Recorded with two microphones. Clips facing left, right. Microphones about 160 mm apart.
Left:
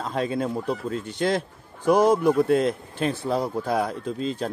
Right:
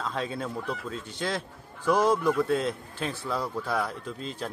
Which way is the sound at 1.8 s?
20° left (ahead or behind).